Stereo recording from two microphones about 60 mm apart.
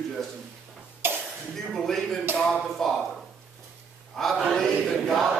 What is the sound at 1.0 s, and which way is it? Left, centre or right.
Cough, right.